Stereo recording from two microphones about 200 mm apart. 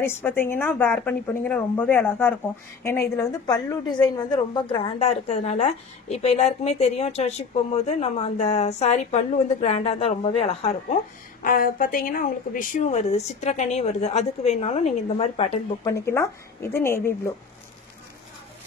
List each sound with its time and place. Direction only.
0.0 s a woman's voice: 10° left (ahead or behind); by 11.0 s 30° left (ahead or behind)
11.4 s speech: 45° left (ahead or behind)
15.8 s speech: 15° left (ahead or behind)